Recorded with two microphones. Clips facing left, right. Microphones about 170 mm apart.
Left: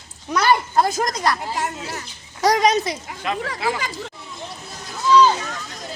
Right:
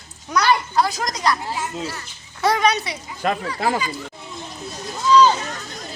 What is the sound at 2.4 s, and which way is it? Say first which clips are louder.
Speech: left 2 dB; 40° left (ahead or behind).